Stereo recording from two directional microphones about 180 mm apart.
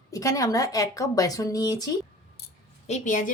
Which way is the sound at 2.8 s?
40° left (ahead or behind).